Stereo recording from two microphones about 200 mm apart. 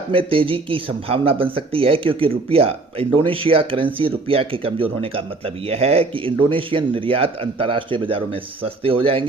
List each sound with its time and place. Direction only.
0.1 s speech: 25° right (ahead or behind)